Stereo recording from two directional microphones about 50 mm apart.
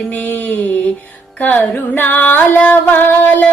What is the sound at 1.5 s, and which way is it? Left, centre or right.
Female singing, left.